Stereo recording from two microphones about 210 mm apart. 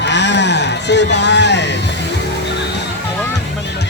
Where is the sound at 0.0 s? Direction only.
55° left (ahead or behind).